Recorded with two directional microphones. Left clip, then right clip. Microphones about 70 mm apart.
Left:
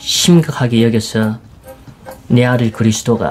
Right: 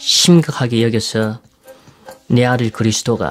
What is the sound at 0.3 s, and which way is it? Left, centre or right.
Speech, right.